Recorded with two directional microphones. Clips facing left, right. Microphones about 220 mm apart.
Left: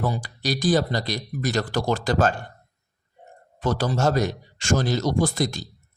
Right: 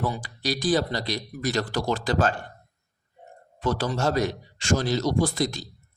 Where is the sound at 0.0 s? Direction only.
45° left (ahead or behind).